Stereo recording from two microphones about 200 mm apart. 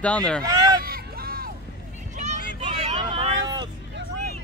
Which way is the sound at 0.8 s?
45° right (ahead or behind).